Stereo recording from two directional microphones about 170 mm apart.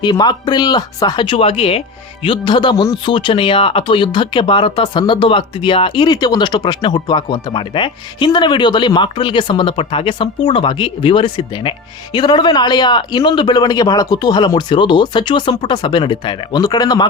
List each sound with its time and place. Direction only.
0.0 s speech: 25° left (ahead or behind)